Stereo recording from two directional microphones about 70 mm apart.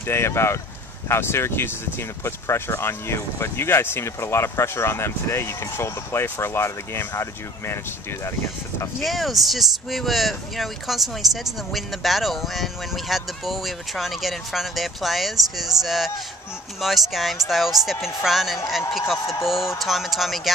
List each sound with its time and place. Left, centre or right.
0.0 s speech: left
9.0 s speech: centre